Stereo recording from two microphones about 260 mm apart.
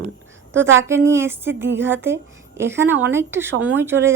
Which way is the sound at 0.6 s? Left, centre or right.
Right.